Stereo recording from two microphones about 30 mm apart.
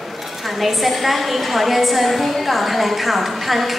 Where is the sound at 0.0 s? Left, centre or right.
Centre.